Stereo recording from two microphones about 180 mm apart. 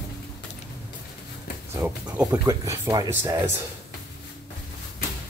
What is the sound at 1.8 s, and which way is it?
Speech, 5° right (ahead or behind).